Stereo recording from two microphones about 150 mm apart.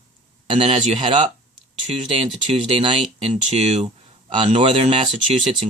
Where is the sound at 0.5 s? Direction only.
40° right (ahead or behind).